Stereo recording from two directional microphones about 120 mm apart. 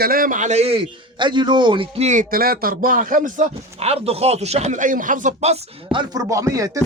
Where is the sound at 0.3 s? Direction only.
85° right; by 2.0 s 50° right (ahead or behind).